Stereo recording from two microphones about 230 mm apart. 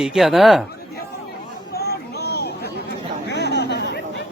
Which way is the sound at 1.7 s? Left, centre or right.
Left.